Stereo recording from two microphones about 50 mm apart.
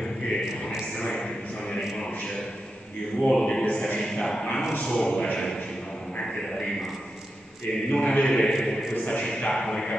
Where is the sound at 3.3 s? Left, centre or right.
Centre.